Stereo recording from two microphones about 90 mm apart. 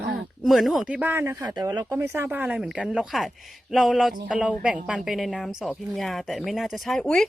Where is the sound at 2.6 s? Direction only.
5° right (ahead or behind).